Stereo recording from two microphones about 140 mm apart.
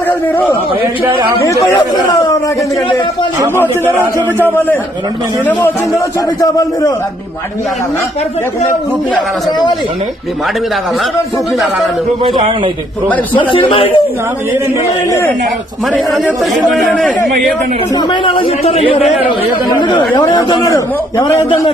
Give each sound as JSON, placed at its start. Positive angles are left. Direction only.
{"t": 1.4, "sound": "a man's voice", "side_deg": 25}
{"t": 4.4, "sound": "a man's voice", "side_deg": 15}
{"t": 9.5, "sound": "a man's voice", "side_deg": 30}
{"t": 13.5, "sound": "speech", "side_deg": 40}
{"t": 16.4, "sound": "speech", "side_deg": 0}
{"t": 17.9, "sound": "speech", "side_deg": 35}
{"t": 19.6, "sound": "a man's voice", "side_deg": 30}